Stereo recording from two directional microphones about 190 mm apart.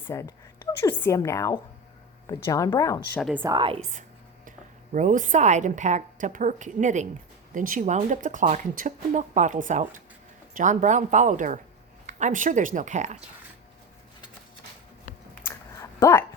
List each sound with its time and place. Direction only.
0.1 s a woman's voice: 15° left (ahead or behind)
3.5 s a woman's voice: 25° right (ahead or behind)
4.9 s a woman's voice: 40° right (ahead or behind)
15.4 s a sound: 15° left (ahead or behind)